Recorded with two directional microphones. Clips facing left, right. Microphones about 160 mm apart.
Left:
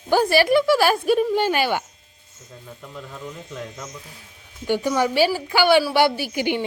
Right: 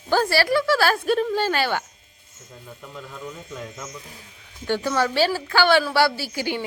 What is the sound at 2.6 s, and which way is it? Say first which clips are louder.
A woman's voice: left 1 dB; centre (ahead or behind).